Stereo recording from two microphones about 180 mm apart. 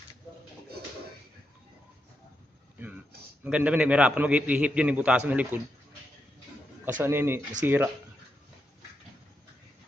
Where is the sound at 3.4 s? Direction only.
5° right (ahead or behind).